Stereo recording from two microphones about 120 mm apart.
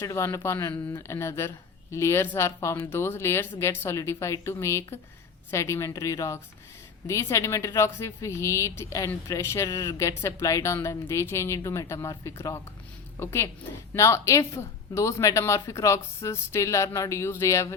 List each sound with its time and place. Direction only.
0.0 s speech: 25° left (ahead or behind)